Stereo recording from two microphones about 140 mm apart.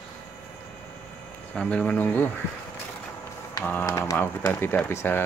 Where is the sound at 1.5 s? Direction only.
10° left (ahead or behind).